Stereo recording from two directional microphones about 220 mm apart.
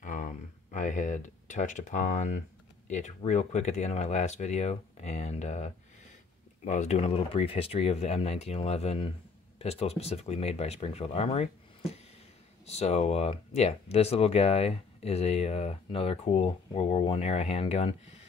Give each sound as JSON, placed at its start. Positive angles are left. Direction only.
{"t": 0.0, "sound": "speech", "side_deg": 35}